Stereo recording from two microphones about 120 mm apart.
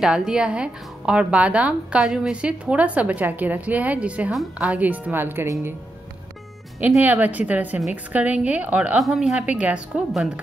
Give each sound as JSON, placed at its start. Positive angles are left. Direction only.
{"t": 0.0, "sound": "a woman's voice", "side_deg": -5}
{"t": 7.0, "sound": "a woman's voice", "side_deg": -15}